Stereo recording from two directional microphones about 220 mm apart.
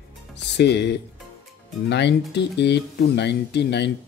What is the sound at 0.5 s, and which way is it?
Speech, 50° left (ahead or behind).